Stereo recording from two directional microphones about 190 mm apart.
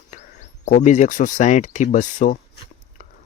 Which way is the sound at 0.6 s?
40° left (ahead or behind).